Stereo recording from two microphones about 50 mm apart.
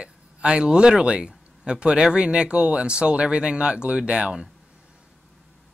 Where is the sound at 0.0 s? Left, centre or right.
Centre.